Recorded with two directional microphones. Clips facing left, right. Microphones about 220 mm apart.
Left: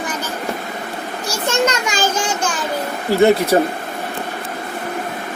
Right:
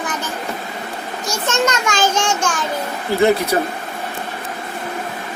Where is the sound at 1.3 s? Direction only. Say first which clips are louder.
Left 1 dB; 10° left (ahead or behind).